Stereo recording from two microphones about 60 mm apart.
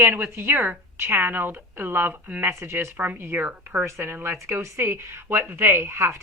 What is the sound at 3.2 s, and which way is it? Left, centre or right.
A woman's voice, right.